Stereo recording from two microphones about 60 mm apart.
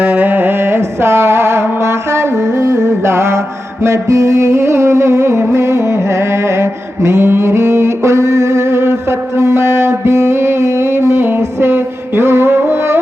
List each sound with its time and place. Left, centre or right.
0.0 s music: right